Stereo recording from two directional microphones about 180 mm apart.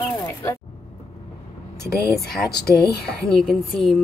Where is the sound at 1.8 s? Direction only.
15° right (ahead or behind).